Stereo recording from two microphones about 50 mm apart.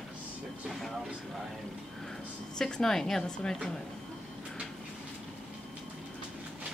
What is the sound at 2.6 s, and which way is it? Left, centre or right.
Speech, centre.